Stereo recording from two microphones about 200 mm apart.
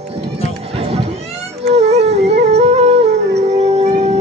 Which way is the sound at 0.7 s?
30° right (ahead or behind).